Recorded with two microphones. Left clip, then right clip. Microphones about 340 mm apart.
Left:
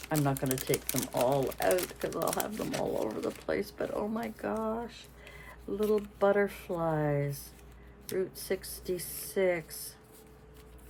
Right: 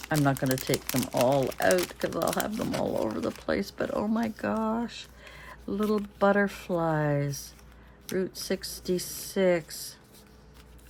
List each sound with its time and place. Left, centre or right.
0.1 s speech: right
5.5 s a sound: right
6.1 s speech: right